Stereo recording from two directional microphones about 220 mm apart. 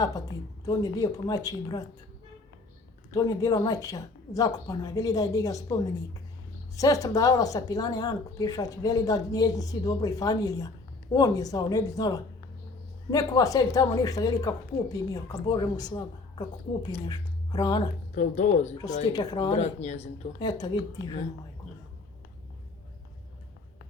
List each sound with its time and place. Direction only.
0.6 s speech: 15° left (ahead or behind)
3.2 s a woman's voice: 15° left (ahead or behind)
18.1 s speech: 35° left (ahead or behind)
19.1 s a woman's voice: 20° left (ahead or behind)
19.5 s speech: 30° left (ahead or behind)
20.4 s speech: 20° left (ahead or behind)